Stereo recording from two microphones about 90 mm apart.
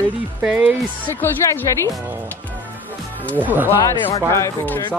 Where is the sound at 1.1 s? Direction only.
30° left (ahead or behind).